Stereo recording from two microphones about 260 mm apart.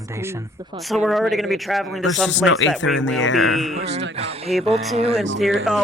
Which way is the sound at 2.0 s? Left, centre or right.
Left.